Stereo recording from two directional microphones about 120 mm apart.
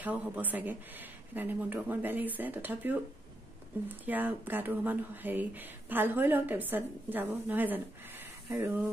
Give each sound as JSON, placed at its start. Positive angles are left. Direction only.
{"t": 0.0, "sound": "speech", "side_deg": -15}
{"t": 4.0, "sound": "speech", "side_deg": -15}